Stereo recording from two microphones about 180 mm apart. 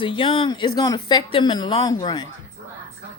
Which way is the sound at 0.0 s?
30° left (ahead or behind).